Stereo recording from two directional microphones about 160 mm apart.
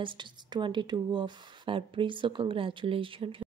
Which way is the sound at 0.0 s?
30° right (ahead or behind).